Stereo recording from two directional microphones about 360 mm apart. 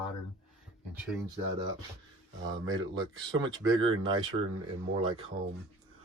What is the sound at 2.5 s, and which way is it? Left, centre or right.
Speech, centre.